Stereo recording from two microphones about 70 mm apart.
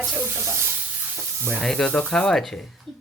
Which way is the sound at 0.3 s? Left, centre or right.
Right.